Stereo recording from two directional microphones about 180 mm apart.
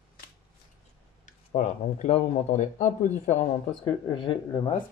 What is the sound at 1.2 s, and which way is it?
Speech, 45° left (ahead or behind).